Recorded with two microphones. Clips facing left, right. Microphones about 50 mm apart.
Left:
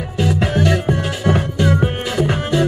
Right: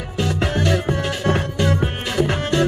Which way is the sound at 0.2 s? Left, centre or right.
Centre.